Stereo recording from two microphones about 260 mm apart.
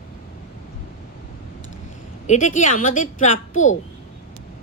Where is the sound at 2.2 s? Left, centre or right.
Left.